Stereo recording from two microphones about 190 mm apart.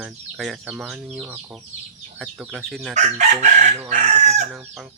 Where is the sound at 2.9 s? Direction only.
40° right (ahead or behind).